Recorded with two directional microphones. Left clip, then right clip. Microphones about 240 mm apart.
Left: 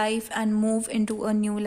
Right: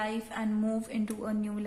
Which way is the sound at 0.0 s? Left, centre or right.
Left.